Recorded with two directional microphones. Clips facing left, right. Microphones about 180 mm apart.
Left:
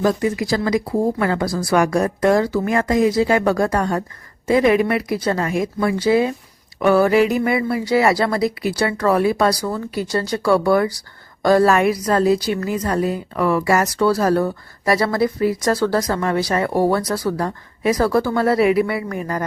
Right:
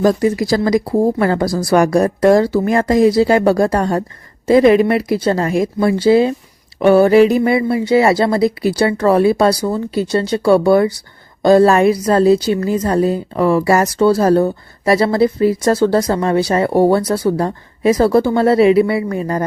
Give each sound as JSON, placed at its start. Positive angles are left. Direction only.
{"t": 0.0, "sound": "a woman's voice", "side_deg": -35}